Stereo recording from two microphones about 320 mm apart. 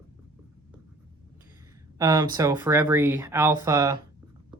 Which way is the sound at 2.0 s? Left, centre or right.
Centre.